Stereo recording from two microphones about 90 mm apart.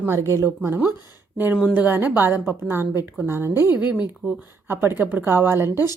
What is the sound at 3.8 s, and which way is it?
A woman's voice, 15° right (ahead or behind).